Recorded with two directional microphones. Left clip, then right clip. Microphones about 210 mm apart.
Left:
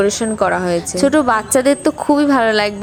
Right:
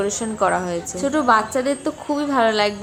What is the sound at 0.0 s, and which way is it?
A woman's voice, 25° left (ahead or behind).